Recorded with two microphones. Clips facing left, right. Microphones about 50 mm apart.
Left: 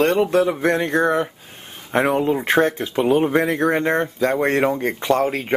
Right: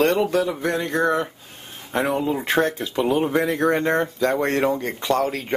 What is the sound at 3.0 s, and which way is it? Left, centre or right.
Speech, centre.